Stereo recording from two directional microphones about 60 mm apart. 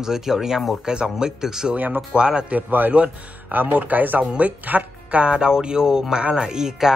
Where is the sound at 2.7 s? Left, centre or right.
Right.